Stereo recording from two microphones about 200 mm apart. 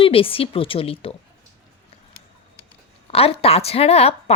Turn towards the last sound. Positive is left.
turn(degrees=30)  # may be behind; listen again after turning